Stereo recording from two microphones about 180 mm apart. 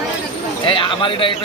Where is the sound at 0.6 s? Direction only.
30° left (ahead or behind).